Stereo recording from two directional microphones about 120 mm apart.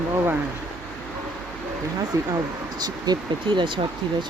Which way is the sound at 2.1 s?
25° right (ahead or behind).